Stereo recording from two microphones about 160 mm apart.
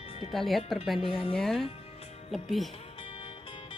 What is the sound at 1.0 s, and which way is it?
Speech, 35° left (ahead or behind).